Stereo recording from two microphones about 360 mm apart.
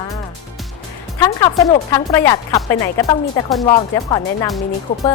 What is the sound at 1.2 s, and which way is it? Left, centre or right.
Speech, centre.